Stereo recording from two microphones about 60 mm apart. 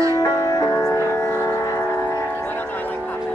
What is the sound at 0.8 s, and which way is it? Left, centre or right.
Music, left.